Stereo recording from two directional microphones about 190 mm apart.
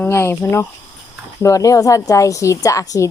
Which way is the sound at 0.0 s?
15° left (ahead or behind).